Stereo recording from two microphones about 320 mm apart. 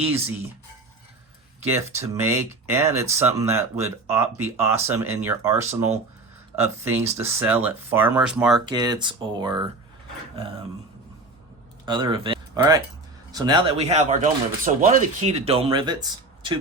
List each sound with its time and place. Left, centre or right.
1.6 s speech: centre
8.6 s speech: centre
11.9 s speech: centre